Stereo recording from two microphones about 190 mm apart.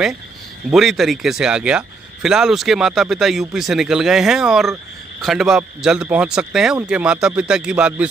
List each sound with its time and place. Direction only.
0.7 s speech: centre (ahead or behind)